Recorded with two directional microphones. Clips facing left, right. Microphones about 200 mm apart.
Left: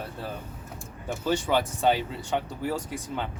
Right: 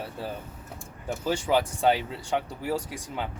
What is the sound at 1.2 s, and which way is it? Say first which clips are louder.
Speech: even; 5° right (ahead or behind).